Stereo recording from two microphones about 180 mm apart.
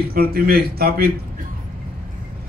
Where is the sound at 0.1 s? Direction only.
55° right (ahead or behind).